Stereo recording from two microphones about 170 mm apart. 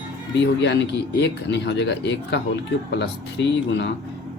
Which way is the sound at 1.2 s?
90° left.